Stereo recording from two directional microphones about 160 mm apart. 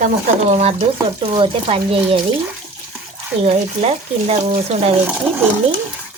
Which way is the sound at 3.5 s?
40° right (ahead or behind).